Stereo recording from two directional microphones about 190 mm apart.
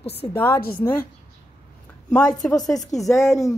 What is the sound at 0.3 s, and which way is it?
Speech, 10° left (ahead or behind).